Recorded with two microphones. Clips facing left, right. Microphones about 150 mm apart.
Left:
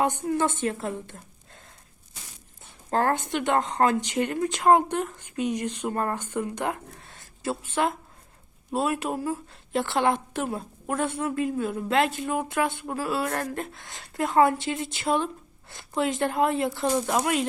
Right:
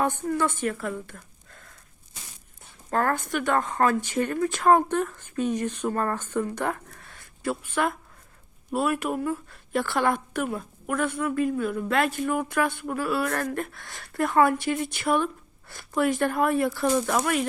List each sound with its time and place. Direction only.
0.0 s a woman's voice: 20° left (ahead or behind)
2.9 s speech: 30° left (ahead or behind)
5.9 s speech: 25° left (ahead or behind)